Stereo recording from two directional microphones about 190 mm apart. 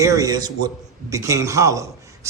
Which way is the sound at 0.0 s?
15° right (ahead or behind).